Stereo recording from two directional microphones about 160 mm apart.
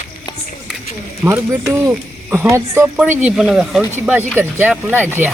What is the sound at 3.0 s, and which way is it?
Speech, 5° right (ahead or behind).